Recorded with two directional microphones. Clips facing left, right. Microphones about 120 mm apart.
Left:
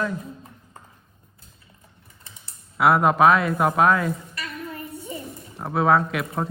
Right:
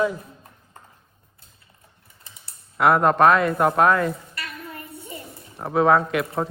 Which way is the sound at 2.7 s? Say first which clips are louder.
Right 1 dB; 5° left (ahead or behind).